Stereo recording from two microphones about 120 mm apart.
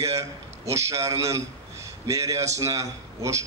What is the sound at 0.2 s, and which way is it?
A man's voice, 25° right (ahead or behind).